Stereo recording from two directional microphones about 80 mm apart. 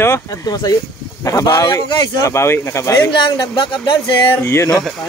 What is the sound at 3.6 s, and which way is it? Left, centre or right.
Speech, left.